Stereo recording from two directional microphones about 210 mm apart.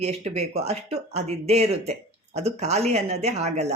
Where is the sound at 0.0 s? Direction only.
30° right (ahead or behind).